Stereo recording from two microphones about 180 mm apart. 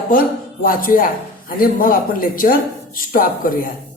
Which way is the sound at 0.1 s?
50° left (ahead or behind).